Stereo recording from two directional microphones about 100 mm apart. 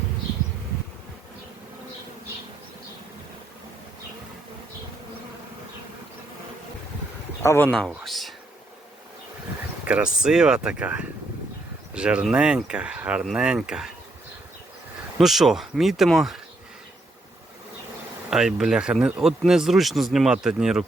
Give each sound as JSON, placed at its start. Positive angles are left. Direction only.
{"t": 7.4, "sound": "speech", "side_deg": 25}
{"t": 7.7, "sound": "speech", "side_deg": 5}
{"t": 9.8, "sound": "speech", "side_deg": -10}
{"t": 15.2, "sound": "speech", "side_deg": -5}
{"t": 18.3, "sound": "speech", "side_deg": -5}